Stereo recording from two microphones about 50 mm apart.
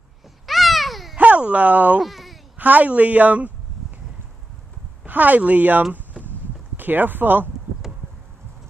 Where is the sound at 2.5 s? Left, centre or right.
Right.